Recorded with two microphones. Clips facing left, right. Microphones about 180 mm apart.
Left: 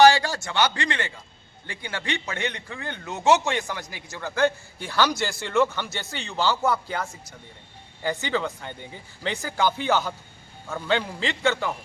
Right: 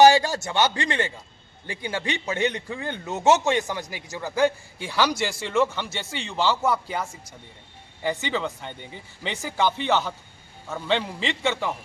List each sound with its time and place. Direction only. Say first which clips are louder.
0.0 s a man's voice: right 1 dB; 20° right (ahead or behind); by 11.7 s centre (ahead or behind)